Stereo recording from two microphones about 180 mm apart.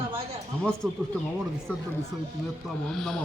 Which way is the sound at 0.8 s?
Centre (ahead or behind).